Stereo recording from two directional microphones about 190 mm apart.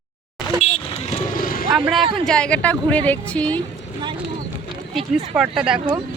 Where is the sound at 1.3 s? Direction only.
50° left (ahead or behind).